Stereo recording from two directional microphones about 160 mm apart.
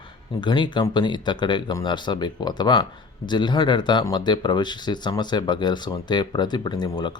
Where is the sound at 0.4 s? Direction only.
30° left (ahead or behind).